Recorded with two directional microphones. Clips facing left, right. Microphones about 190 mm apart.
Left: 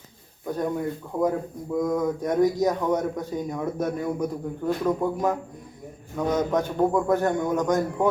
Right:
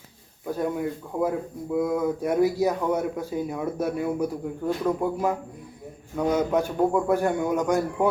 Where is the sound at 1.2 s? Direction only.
10° right (ahead or behind).